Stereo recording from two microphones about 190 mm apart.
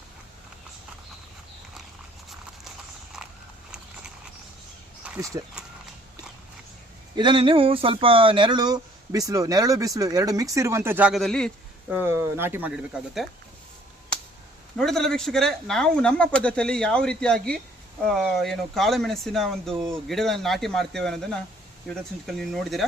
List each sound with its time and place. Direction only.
5.0 s a sound: 15° right (ahead or behind)
7.2 s speech: 25° right (ahead or behind); by 11.5 s 5° left (ahead or behind)
11.9 s speech: 10° right (ahead or behind)
14.8 s speech: centre (ahead or behind)